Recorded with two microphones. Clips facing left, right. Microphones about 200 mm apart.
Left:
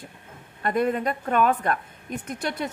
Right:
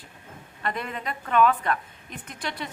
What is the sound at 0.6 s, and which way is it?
A woman's voice, 50° left (ahead or behind).